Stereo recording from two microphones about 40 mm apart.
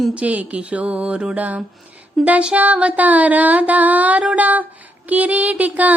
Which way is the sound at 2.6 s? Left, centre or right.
Right.